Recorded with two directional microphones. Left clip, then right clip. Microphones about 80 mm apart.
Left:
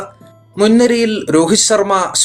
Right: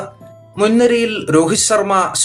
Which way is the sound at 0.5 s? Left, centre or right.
Left.